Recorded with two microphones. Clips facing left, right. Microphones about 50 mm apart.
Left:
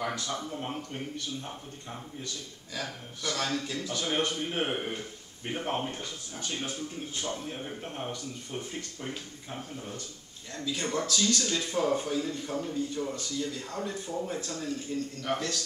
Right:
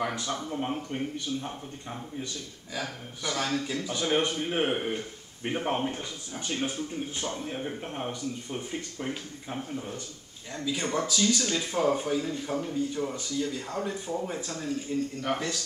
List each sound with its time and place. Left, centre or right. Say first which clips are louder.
0.0 s speech: right 2 dB; centre